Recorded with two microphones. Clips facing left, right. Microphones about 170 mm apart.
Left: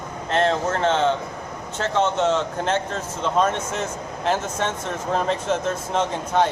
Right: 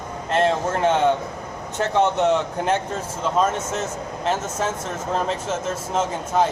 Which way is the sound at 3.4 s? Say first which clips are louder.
Even; centre (ahead or behind).